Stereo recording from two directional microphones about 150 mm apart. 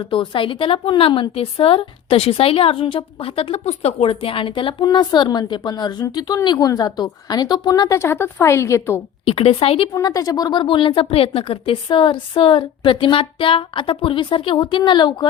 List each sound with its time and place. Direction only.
0.0 s a woman's voice: 35° left (ahead or behind); by 9.0 s 20° left (ahead or behind)
9.2 s a woman's voice: 40° left (ahead or behind)
9.9 s a woman's voice: 25° left (ahead or behind)